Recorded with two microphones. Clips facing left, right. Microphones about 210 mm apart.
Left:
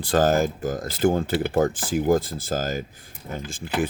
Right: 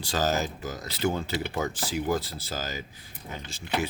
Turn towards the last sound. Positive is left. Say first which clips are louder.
# left 6 dB
turn(degrees=50)  # may be behind; listen again after turning